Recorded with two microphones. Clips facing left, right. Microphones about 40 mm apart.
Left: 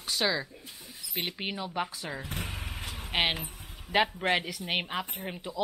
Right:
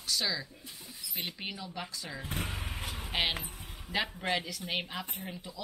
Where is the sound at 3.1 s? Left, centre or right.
Left.